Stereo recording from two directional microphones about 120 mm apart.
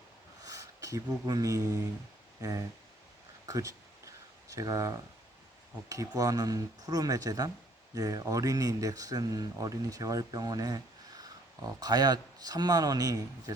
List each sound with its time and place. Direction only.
0.4 s speech: 25° right (ahead or behind)
3.4 s a sound: 30° right (ahead or behind)
5.9 s speech: 30° right (ahead or behind)